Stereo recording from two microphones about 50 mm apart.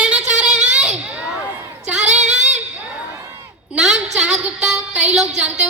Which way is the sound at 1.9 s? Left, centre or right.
Centre.